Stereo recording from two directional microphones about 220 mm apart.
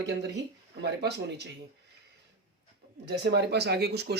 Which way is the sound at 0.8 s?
50° right (ahead or behind).